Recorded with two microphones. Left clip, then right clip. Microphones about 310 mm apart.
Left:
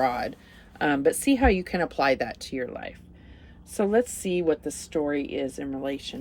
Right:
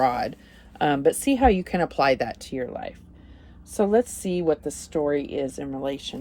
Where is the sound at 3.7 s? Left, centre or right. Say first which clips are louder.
Right 2 dB; right.